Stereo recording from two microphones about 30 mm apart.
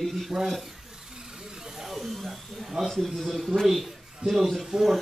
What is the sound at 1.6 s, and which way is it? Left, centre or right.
Snake, centre.